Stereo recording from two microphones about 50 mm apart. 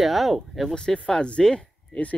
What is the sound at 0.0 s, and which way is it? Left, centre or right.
Speech, centre.